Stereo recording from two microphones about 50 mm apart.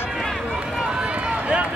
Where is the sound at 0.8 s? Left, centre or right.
Centre.